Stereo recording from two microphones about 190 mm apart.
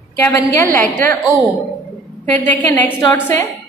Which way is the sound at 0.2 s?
15° left (ahead or behind).